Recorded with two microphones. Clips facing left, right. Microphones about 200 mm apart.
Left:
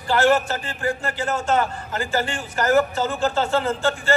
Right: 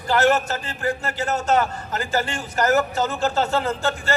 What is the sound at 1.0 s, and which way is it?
A man's voice, 40° right (ahead or behind).